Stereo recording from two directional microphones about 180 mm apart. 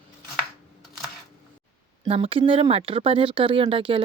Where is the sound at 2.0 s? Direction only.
30° right (ahead or behind).